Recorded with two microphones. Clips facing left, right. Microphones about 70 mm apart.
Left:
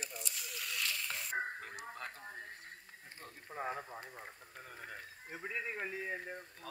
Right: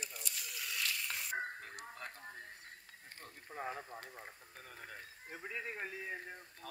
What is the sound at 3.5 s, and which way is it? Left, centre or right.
Speech, left.